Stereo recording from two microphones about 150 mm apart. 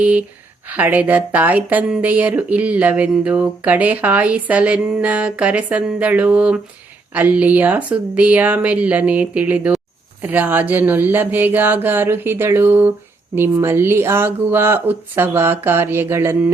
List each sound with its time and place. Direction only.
0.0 s speech: 10° right (ahead or behind)